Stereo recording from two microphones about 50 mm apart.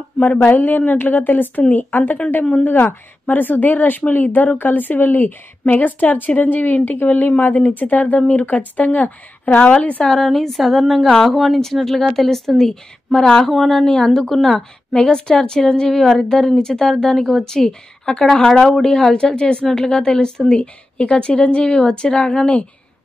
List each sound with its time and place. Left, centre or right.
0.2 s a woman's voice: left
10.1 s a sound: centre
13.1 s a woman's voice: centre
13.5 s a woman's voice: centre